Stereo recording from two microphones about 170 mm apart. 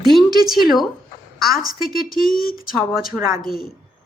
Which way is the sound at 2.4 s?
60° left (ahead or behind).